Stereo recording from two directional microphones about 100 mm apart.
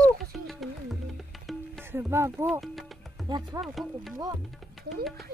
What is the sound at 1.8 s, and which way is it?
Speech, 25° right (ahead or behind).